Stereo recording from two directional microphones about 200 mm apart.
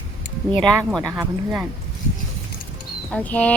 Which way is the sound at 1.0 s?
10° right (ahead or behind).